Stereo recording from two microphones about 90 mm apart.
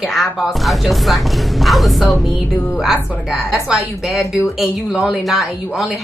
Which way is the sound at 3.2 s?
5° right (ahead or behind).